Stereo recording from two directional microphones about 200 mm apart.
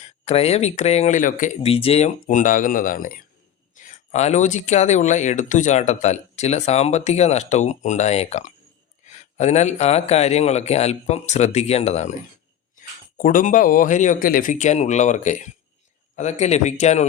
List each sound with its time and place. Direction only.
0.0 s speech: 30° left (ahead or behind)